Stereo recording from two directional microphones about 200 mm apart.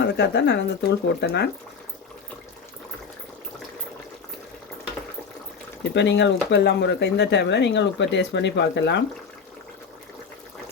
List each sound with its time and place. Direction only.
0.0 s speech: 60° left (ahead or behind)
5.9 s speech: 60° left (ahead or behind)